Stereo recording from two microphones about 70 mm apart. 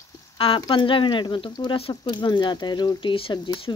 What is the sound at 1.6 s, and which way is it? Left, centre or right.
Speech, left.